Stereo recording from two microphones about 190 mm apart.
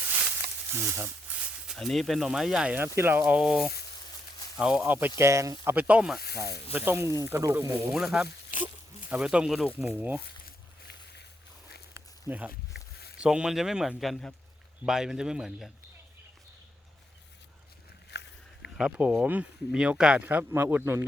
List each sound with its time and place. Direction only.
0.7 s speech: 10° right (ahead or behind)
6.1 s speech: 55° left (ahead or behind)
6.7 s speech: 10° right (ahead or behind)
7.9 s speech: centre (ahead or behind)
8.4 s a sound: 45° left (ahead or behind)
9.0 s speech: 5° right (ahead or behind)
10.4 s boat: 60° left (ahead or behind)
11.9 s a sound: 10° right (ahead or behind)
12.5 s a sound: 55° left (ahead or behind)
13.1 s speech: 5° right (ahead or behind)
18.1 s a sound: 65° left (ahead or behind)
18.8 s speech: 5° right (ahead or behind)